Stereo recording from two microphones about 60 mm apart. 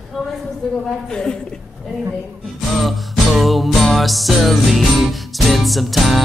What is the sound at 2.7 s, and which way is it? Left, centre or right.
Music, centre.